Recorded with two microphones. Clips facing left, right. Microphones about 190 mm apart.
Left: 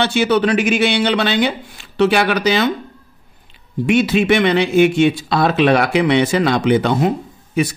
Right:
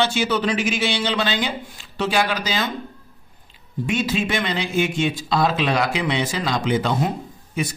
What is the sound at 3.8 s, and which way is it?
A man's voice, 70° left (ahead or behind).